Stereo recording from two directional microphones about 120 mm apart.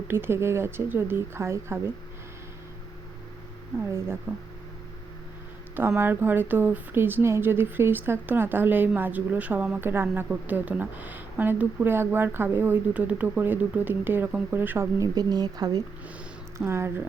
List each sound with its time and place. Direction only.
0.1 s speech: 20° right (ahead or behind)
3.9 s speech: 20° right (ahead or behind)
6.0 s speech: 15° right (ahead or behind); by 15.8 s 35° right (ahead or behind)
16.6 s speech: 20° right (ahead or behind)